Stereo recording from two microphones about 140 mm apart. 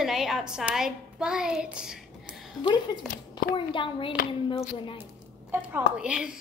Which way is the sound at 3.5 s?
35° left (ahead or behind).